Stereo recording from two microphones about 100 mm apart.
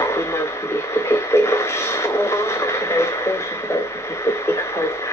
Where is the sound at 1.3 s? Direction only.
25° left (ahead or behind).